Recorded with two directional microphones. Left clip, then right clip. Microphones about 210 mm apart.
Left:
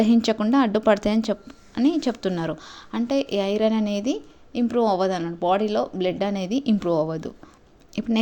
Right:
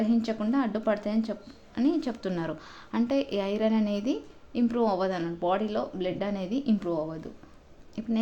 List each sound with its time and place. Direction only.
0.0 s a woman's voice: 35° left (ahead or behind)